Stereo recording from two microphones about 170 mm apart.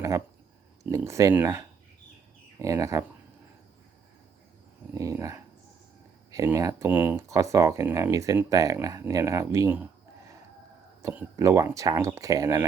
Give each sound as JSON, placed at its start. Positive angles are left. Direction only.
{"t": 0.9, "sound": "speech", "side_deg": -15}
{"t": 4.9, "sound": "speech", "side_deg": -20}
{"t": 11.0, "sound": "speech", "side_deg": -15}